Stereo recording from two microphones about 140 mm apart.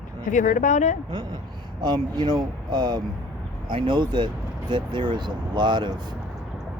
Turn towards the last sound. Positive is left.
turn(degrees=-30)  # may be behind; listen again after turning